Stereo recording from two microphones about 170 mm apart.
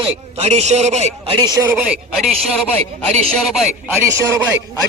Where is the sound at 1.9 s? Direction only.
Centre (ahead or behind).